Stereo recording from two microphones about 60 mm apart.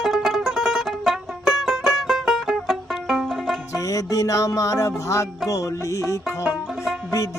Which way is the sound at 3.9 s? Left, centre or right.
Left.